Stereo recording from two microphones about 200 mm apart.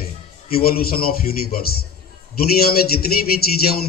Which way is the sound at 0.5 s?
50° left (ahead or behind).